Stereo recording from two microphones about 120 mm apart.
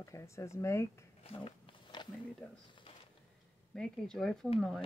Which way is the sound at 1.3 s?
50° left (ahead or behind).